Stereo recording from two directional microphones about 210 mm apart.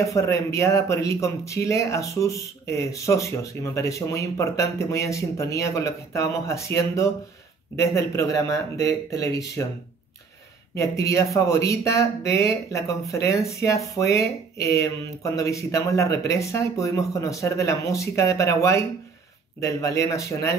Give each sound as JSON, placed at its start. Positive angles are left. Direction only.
{"t": 0.0, "sound": "speech", "side_deg": 15}
{"t": 10.8, "sound": "speech", "side_deg": 15}